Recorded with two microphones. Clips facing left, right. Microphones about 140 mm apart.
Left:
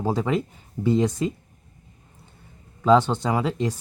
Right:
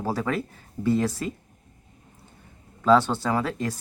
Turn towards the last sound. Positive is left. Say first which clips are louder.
# left 2 dB
turn(degrees=15)  # may be behind; listen again after turning